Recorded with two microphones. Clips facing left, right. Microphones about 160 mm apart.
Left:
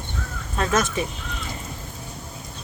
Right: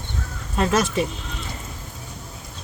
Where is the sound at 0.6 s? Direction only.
35° right (ahead or behind).